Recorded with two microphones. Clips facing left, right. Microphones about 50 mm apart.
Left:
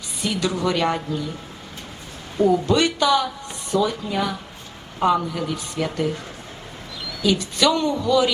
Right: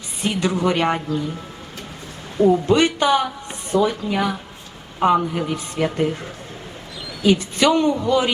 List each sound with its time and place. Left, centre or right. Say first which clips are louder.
0.2 s a woman's voice: right 3 dB; right
2.5 s a woman's voice: right 3 dB; right
7.2 s a woman's voice: right 3 dB; right